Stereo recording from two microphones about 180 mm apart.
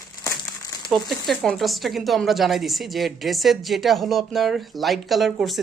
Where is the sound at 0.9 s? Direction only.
Centre (ahead or behind).